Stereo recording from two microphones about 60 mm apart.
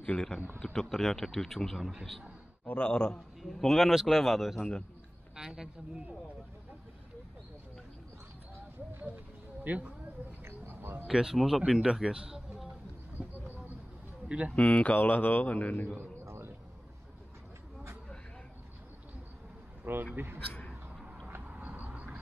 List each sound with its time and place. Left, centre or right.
0.0 s a man's voice: centre
2.6 s a man's voice: centre
9.0 s bird: right
10.4 s a sound: right
11.1 s a man's voice: centre
11.6 s speech: centre
14.5 s speech: left
15.0 s speech: left
16.3 s music: right
19.8 s speech: right
21.5 s vehicle: right